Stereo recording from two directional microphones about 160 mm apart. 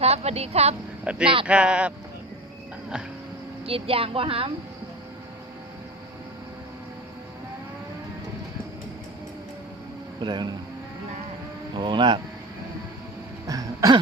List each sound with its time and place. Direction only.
0.0 s a woman's voice: 40° right (ahead or behind)
1.1 s speech: 5° right (ahead or behind)
3.7 s a woman's voice: 35° right (ahead or behind)
10.2 s speech: 25° right (ahead or behind)
11.8 s speech: 30° right (ahead or behind)
13.5 s throat clearing: 25° right (ahead or behind)